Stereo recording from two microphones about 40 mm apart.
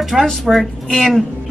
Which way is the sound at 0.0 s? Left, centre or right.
Centre.